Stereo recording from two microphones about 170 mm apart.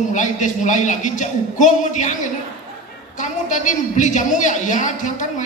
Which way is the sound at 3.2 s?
45° left (ahead or behind).